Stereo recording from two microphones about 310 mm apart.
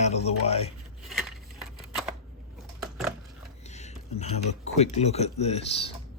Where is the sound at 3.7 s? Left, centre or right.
Left.